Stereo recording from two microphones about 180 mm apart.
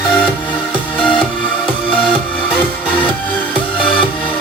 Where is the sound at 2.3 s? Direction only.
5° left (ahead or behind).